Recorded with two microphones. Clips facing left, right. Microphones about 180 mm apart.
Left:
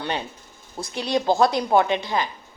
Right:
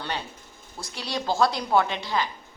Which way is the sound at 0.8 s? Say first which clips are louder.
Left 8 dB; 20° left (ahead or behind).